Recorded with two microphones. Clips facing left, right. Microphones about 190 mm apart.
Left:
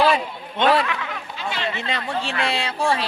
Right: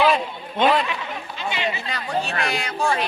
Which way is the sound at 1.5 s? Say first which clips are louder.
Right 1 dB; 5° right (ahead or behind).